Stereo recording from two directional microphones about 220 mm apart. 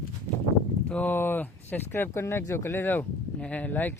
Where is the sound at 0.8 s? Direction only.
5° left (ahead or behind).